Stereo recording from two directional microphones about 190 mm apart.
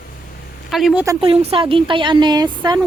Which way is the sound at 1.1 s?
25° right (ahead or behind).